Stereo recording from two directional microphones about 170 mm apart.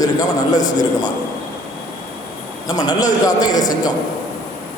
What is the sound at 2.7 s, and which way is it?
Speech, 20° left (ahead or behind).